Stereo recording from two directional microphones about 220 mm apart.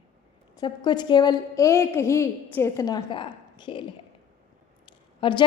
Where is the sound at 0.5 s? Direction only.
20° left (ahead or behind).